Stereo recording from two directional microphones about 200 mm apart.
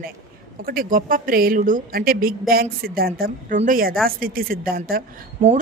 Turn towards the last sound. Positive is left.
turn(degrees=-45)  # may be behind; listen again after turning